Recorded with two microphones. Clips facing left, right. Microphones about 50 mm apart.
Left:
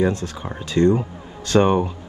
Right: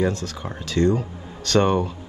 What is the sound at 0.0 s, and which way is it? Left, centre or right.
Speech, left.